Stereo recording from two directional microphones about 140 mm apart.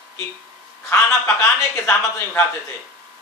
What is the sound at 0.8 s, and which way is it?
Speech, 20° left (ahead or behind).